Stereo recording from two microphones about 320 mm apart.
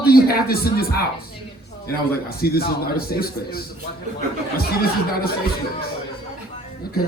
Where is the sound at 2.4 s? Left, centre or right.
Left.